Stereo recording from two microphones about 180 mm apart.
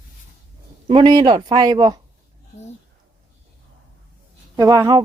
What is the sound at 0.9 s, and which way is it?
Speech, 25° right (ahead or behind).